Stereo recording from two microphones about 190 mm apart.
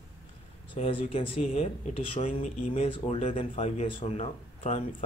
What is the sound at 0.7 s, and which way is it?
Speech, 30° left (ahead or behind).